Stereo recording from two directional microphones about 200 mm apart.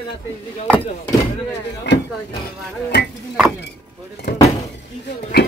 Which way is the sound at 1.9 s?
60° left (ahead or behind).